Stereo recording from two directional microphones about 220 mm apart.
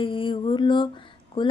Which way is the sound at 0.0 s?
25° left (ahead or behind).